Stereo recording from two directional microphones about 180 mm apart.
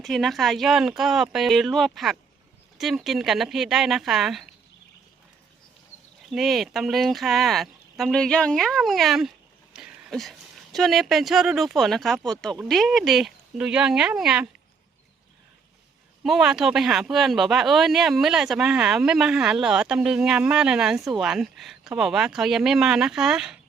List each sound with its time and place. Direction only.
0.0 s speech: centre (ahead or behind)
6.3 s speech: centre (ahead or behind)
16.2 s speech: 5° right (ahead or behind)